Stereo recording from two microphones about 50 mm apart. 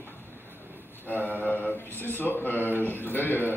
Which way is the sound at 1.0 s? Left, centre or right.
Left.